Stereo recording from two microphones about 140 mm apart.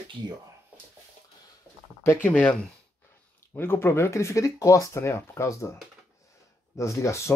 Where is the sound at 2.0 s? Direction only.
20° left (ahead or behind).